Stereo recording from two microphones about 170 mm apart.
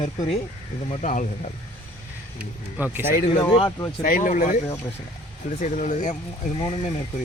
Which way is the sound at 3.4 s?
30° left (ahead or behind).